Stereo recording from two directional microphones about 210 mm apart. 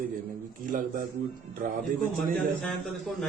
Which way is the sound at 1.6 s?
40° right (ahead or behind).